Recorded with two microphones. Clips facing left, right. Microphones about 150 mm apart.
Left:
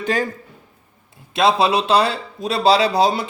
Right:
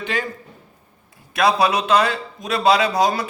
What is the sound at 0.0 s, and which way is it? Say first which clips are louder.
Speech: left 5 dB; 40° left (ahead or behind).